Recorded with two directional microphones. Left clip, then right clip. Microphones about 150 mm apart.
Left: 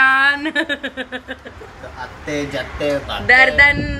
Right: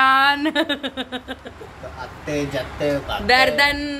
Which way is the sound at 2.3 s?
5° left (ahead or behind).